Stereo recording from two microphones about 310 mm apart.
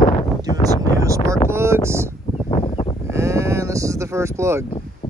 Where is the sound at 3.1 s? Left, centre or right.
Centre.